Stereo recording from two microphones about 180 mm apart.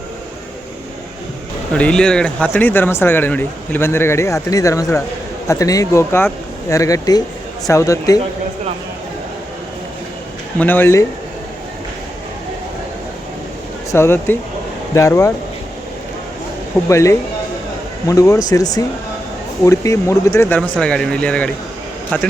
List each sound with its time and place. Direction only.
1.7 s speech: 5° left (ahead or behind)
10.6 s speech: 10° left (ahead or behind)
13.9 s speech: 15° left (ahead or behind)
16.9 s speech: 15° left (ahead or behind)
20.6 s speech: 5° left (ahead or behind)